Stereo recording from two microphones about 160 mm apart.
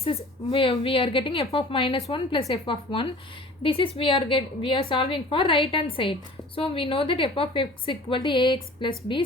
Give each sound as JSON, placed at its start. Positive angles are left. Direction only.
{"t": 0.0, "sound": "a woman's voice", "side_deg": 40}